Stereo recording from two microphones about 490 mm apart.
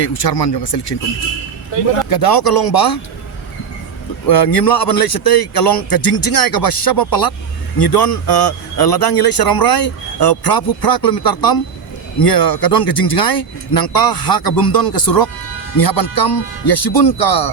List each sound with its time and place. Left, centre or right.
0.0 s speech: left
2.0 s speech: left
4.3 s speech: left